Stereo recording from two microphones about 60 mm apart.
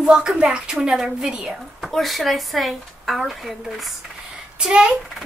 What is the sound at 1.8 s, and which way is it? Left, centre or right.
Speech, centre.